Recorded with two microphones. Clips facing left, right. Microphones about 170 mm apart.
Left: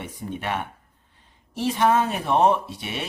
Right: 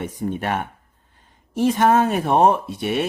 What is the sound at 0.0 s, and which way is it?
Speech, 45° right (ahead or behind).